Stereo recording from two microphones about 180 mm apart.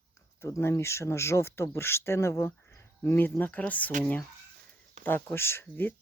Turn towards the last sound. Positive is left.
turn(degrees=10)  # may be behind; listen again after turning